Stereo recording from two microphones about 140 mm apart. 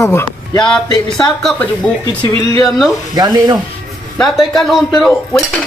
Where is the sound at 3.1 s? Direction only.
30° right (ahead or behind).